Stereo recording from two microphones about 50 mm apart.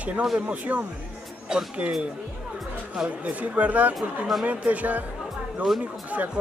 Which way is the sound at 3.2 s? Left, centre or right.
Right.